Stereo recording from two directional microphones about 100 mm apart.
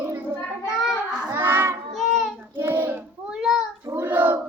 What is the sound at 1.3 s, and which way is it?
Child singing, 25° right (ahead or behind).